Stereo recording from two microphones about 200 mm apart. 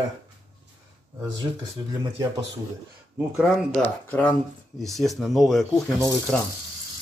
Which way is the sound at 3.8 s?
5° left (ahead or behind).